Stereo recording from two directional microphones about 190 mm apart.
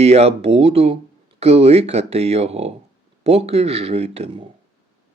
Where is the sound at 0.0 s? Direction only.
35° right (ahead or behind).